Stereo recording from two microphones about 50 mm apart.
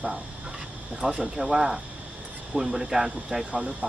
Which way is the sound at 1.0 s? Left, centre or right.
Centre.